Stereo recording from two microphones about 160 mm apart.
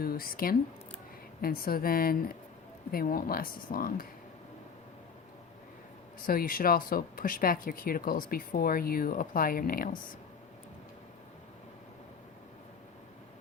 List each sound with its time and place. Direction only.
0.0 s speech: 65° left (ahead or behind)
6.2 s speech: 60° left (ahead or behind)